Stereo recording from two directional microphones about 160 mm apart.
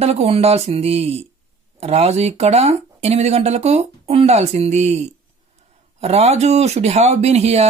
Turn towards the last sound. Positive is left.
turn(degrees=-40)  # may be behind; listen again after turning